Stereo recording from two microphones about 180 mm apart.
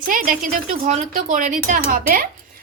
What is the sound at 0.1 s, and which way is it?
Speech, 50° right (ahead or behind).